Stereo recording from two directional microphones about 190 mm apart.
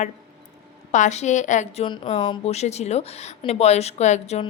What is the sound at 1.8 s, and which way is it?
A woman's voice, 25° left (ahead or behind).